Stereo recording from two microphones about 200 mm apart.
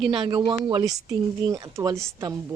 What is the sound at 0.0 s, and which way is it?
Speech, centre (ahead or behind).